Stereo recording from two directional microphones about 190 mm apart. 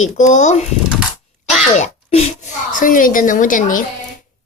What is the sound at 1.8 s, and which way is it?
A woman's voice, 35° left (ahead or behind).